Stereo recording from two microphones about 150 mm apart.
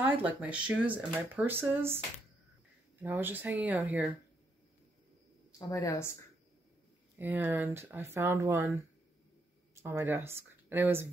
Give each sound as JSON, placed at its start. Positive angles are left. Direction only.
{"t": 0.0, "sound": "speech", "side_deg": -10}
{"t": 3.0, "sound": "speech", "side_deg": -15}
{"t": 5.6, "sound": "a woman's voice", "side_deg": 20}
{"t": 7.2, "sound": "speech", "side_deg": -15}